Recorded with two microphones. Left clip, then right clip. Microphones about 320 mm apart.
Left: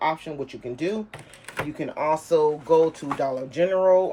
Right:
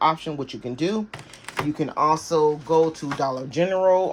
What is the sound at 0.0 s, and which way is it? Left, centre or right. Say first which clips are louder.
Speech: right 4 dB; centre.